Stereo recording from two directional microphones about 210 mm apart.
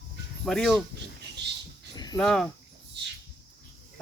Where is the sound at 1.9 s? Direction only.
20° left (ahead or behind).